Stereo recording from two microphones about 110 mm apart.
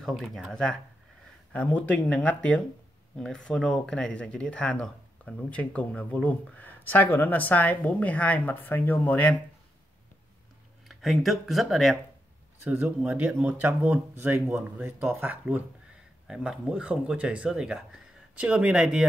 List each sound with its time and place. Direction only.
0.0 s speech: centre (ahead or behind)
10.9 s speech: centre (ahead or behind)
12.6 s speech: 15° right (ahead or behind)
16.3 s speech: 5° right (ahead or behind)